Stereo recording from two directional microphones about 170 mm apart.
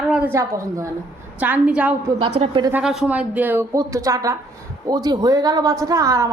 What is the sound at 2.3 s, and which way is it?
Speech, 35° right (ahead or behind).